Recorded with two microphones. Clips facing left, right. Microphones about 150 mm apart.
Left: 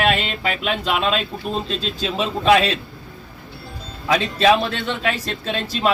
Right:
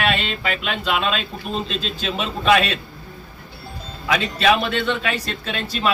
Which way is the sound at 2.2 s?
30° left (ahead or behind).